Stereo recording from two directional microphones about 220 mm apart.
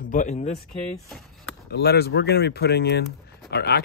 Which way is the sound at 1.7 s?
45° left (ahead or behind).